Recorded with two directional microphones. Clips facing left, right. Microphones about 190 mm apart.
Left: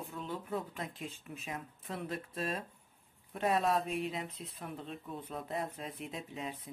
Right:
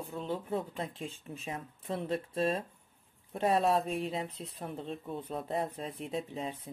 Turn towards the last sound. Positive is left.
turn(degrees=-30)  # may be behind; listen again after turning